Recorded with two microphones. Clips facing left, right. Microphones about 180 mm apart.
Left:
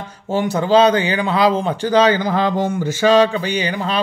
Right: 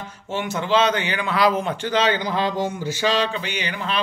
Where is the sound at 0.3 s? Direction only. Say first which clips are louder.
Left 7 dB; 35° left (ahead or behind).